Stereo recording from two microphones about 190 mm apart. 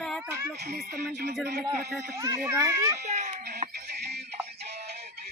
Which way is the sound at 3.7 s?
60° right (ahead or behind).